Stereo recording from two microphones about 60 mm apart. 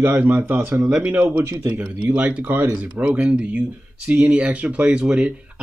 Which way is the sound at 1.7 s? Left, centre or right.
Right.